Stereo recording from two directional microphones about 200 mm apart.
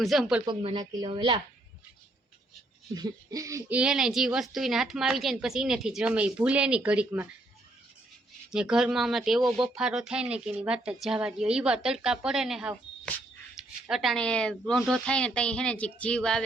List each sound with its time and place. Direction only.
0.0 s speech: centre (ahead or behind)
0.4 s speech: 25° right (ahead or behind)
2.9 s speech: 20° right (ahead or behind)
8.5 s a woman's voice: 5° right (ahead or behind)